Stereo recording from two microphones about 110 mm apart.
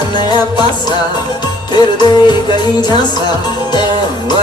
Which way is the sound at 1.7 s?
40° left (ahead or behind).